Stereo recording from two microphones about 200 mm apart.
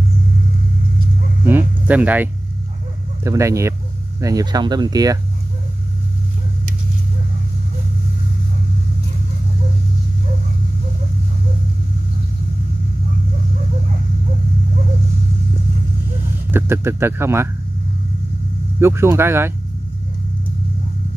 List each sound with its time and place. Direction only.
1.4 s a sound: 10° right (ahead or behind)
3.3 s speech: 15° right (ahead or behind)
16.5 s speech: 10° right (ahead or behind)
18.8 s speech: 10° right (ahead or behind)